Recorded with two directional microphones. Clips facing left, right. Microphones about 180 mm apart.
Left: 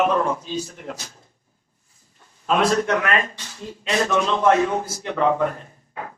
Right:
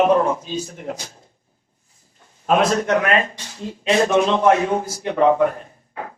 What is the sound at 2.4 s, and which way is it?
Speech, 45° right (ahead or behind).